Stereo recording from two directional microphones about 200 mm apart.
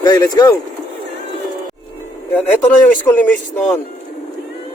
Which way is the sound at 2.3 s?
10° left (ahead or behind).